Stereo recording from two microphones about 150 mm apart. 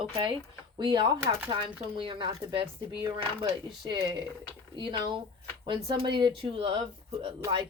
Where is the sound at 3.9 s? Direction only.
30° right (ahead or behind).